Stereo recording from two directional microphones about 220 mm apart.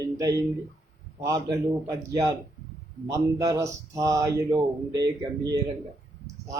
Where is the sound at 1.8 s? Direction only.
15° right (ahead or behind).